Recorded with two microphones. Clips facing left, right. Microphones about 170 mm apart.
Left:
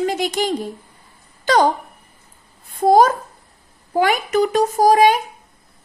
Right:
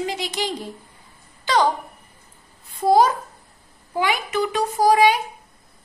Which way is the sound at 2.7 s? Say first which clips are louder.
Left 3 dB; 50° left (ahead or behind).